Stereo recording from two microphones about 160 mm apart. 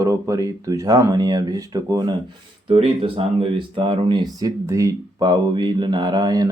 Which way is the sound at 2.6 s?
40° right (ahead or behind).